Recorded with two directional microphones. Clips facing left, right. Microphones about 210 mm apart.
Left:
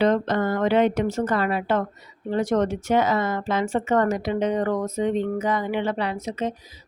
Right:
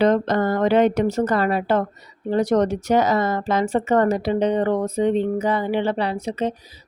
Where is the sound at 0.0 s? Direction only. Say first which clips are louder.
Right 3 dB; 40° right (ahead or behind).